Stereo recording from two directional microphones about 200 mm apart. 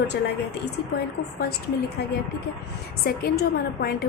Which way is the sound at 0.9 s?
50° left (ahead or behind).